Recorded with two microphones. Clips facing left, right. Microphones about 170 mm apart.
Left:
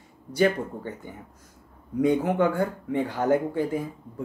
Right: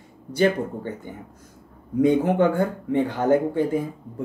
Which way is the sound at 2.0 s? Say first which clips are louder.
Right 3 dB; 25° right (ahead or behind).